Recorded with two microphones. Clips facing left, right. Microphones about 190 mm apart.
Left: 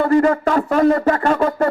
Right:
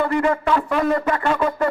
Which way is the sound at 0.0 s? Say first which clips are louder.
Left 5 dB; 40° left (ahead or behind).